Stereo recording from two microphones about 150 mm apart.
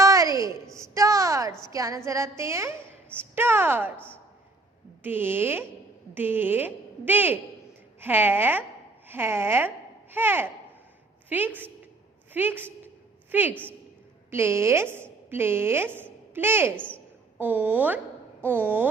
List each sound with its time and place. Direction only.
0.0 s a sound: 20° right (ahead or behind)
1.7 s a woman's voice: 20° right (ahead or behind)
3.9 s a man's voice: 10° left (ahead or behind)
5.0 s a woman's voice: 15° right (ahead or behind)
16.7 s a man's voice: 10° left (ahead or behind)
17.3 s a woman's voice: 10° right (ahead or behind)